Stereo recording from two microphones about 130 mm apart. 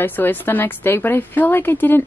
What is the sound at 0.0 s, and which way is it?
A woman's voice, 15° left (ahead or behind).